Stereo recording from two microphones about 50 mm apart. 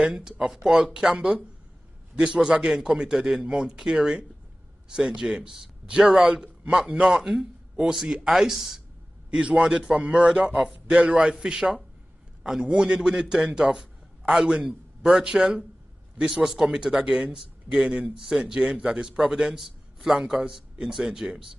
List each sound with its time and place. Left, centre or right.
0.1 s a man's voice: centre
9.4 s a man's voice: centre